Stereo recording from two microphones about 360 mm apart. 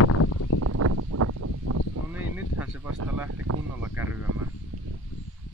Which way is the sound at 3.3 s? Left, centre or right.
Right.